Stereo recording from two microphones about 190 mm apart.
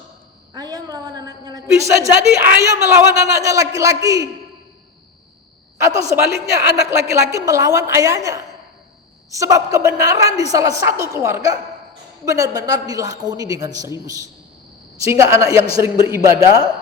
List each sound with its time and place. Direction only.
0.5 s a man's voice: 20° right (ahead or behind)
5.8 s a woman's voice: 15° right (ahead or behind)